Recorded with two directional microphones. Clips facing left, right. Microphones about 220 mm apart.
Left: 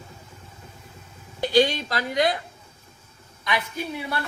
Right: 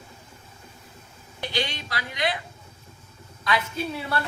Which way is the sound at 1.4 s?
45° left (ahead or behind).